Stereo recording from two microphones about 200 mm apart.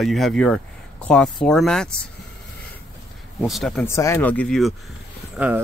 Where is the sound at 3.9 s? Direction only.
15° left (ahead or behind).